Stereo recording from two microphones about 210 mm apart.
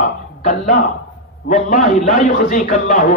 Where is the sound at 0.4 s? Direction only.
40° left (ahead or behind).